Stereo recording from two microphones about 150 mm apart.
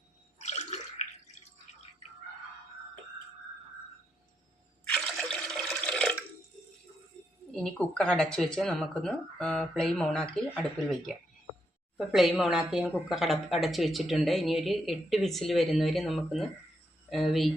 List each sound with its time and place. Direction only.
0.3 s drip: 50° left (ahead or behind)
4.9 s water: 5° left (ahead or behind)
7.5 s a woman's voice: 5° left (ahead or behind)